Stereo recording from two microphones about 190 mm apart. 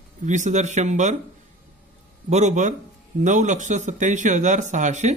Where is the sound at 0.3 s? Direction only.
40° right (ahead or behind).